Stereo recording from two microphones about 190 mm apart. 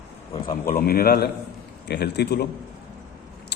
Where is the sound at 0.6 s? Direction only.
50° left (ahead or behind).